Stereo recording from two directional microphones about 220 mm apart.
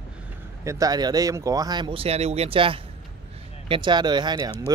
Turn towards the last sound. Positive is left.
turn(degrees=-20)  # may be behind; listen again after turning